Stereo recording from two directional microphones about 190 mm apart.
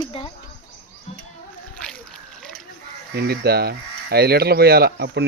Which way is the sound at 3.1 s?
55° right (ahead or behind).